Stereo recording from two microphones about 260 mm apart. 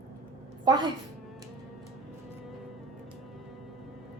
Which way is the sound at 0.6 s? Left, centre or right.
Centre.